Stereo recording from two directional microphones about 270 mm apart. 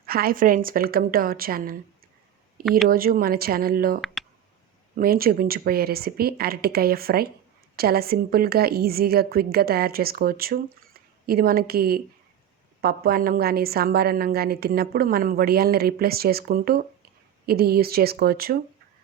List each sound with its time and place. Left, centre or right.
0.0 s a woman's voice: right
4.0 s clicking: centre
4.9 s a woman's voice: right